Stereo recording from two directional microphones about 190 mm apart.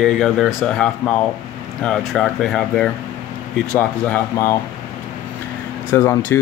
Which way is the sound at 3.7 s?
15° left (ahead or behind).